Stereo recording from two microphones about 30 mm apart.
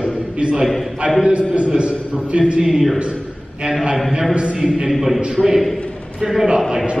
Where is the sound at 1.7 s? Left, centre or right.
Right.